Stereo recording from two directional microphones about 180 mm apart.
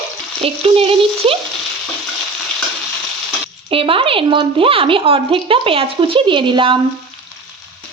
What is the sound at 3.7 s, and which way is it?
Speech, 30° right (ahead or behind).